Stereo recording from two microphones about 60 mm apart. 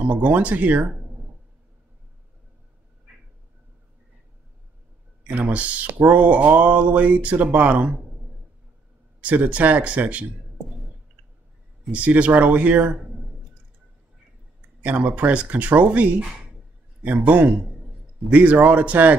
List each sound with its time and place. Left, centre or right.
0.0 s speech: right
5.2 s speech: right
9.2 s speech: right
11.9 s speech: right
14.8 s speech: right